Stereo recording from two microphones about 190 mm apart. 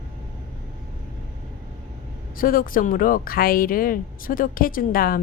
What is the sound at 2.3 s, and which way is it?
Speech, 50° left (ahead or behind).